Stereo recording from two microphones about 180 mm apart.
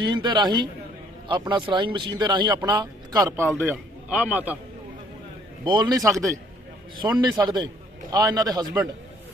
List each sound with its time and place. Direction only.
0.0 s speech: 25° right (ahead or behind); by 4.6 s 10° right (ahead or behind)
5.7 s a man's voice: 25° right (ahead or behind)